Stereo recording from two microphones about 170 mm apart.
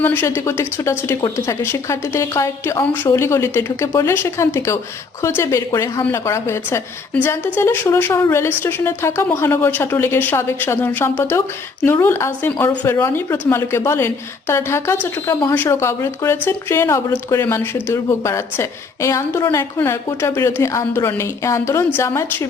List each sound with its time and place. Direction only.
0.0 s a woman's voice: 10° left (ahead or behind)